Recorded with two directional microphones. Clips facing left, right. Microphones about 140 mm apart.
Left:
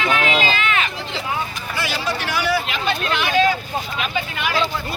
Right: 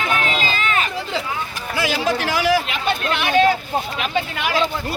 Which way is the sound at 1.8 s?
90° right.